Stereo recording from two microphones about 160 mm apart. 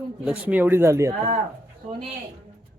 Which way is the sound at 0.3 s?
10° right (ahead or behind).